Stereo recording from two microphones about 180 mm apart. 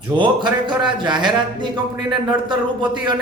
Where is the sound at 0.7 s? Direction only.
25° right (ahead or behind).